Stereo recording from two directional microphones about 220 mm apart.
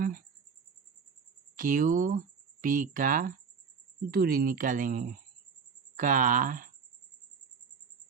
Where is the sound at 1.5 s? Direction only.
40° right (ahead or behind).